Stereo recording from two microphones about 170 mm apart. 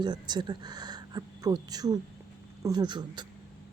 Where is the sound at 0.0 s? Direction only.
25° right (ahead or behind).